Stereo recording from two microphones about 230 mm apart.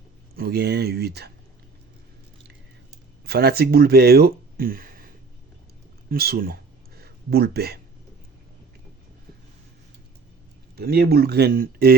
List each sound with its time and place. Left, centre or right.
0.3 s speech: right
3.2 s speech: right
6.1 s a sound: right
10.8 s speech: right